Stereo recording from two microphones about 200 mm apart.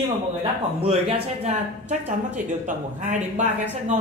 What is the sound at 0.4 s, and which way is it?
Speech, 30° right (ahead or behind).